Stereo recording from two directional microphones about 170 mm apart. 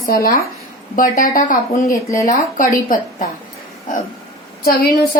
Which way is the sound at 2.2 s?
50° left (ahead or behind).